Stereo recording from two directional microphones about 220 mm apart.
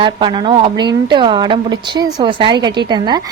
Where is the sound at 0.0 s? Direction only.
20° right (ahead or behind).